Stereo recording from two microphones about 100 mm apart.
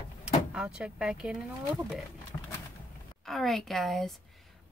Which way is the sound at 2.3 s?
35° left (ahead or behind).